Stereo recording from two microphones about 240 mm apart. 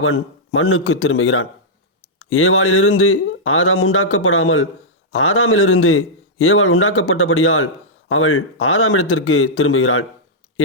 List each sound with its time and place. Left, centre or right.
0.0 s speech: left